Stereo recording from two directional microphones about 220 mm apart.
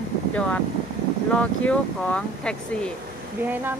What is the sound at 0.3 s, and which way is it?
Speech, 5° left (ahead or behind).